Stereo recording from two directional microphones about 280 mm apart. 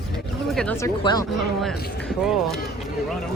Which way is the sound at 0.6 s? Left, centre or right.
Centre.